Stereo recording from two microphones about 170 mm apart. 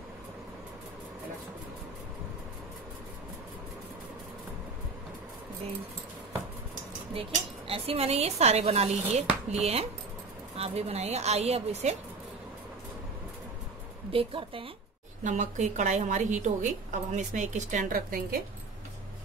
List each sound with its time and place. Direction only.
7.6 s speech: 35° right (ahead or behind)
14.1 s speech: 30° right (ahead or behind)
15.2 s a woman's voice: 45° right (ahead or behind)